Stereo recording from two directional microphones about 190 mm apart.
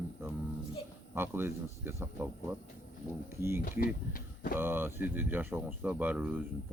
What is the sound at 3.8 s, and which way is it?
Speech, 50° left (ahead or behind).